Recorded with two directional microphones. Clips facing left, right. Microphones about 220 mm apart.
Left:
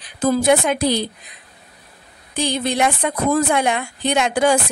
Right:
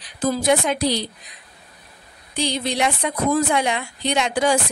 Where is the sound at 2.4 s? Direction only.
50° left (ahead or behind).